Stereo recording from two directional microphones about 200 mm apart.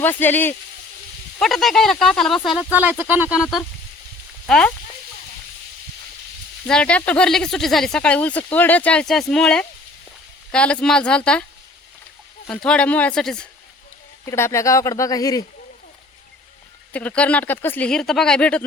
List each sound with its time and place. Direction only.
0.0 s speech: 10° left (ahead or behind); by 3.4 s 5° right (ahead or behind)
4.4 s speech: 5° left (ahead or behind)
6.7 s speech: 5° left (ahead or behind)
12.5 s speech: 5° left (ahead or behind)
16.9 s speech: 5° left (ahead or behind)